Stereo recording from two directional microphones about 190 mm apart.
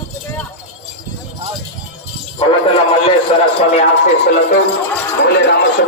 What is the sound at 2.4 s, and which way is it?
Music, 30° left (ahead or behind).